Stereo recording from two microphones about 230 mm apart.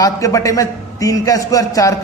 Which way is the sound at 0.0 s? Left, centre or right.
Centre.